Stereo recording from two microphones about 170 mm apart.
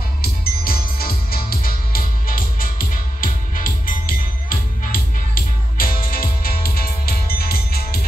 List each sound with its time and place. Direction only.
0.2 s music: 60° left (ahead or behind)